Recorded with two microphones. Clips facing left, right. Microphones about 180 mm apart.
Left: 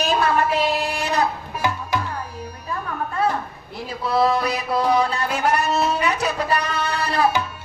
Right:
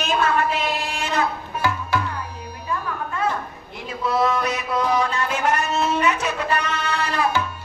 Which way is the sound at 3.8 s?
35° left (ahead or behind).